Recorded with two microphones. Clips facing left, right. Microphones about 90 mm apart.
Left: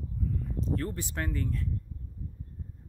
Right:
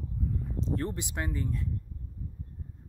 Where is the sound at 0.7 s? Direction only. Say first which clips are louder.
Even; 20° right (ahead or behind).